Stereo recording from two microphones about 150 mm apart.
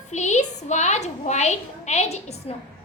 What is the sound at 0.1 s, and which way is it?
A woman's voice, 50° left (ahead or behind).